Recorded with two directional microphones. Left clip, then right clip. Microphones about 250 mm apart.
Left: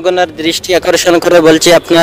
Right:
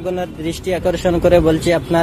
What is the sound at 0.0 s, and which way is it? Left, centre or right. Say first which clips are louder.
A man's voice: left 11 dB; left.